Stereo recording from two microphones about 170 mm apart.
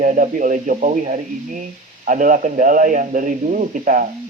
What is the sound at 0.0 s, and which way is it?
A man's voice, 45° right (ahead or behind).